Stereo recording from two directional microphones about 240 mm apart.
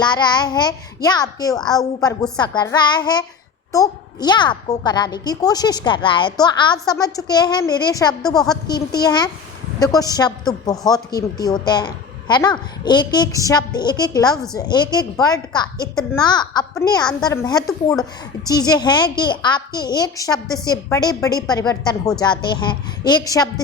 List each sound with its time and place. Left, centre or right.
0.0 s a woman's voice: centre